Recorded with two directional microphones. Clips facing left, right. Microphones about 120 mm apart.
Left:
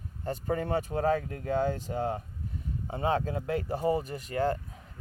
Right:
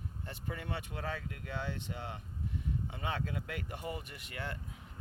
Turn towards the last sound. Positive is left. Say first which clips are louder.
# left 14 dB
turn(degrees=40)  # may be behind; listen again after turning